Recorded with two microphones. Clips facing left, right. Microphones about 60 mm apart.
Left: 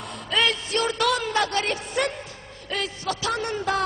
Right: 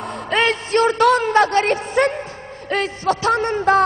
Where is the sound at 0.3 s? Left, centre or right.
Right.